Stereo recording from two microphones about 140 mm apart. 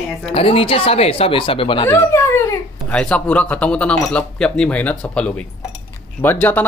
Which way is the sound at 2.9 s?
5° left (ahead or behind).